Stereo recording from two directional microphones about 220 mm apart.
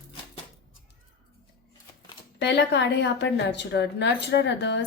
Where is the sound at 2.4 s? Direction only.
50° left (ahead or behind).